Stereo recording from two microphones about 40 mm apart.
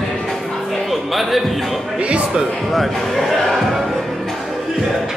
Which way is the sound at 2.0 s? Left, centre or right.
Right.